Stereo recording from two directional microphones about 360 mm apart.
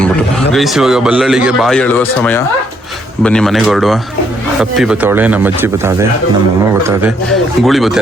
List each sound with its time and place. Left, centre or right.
0.5 s speech: centre
7.6 s speech: centre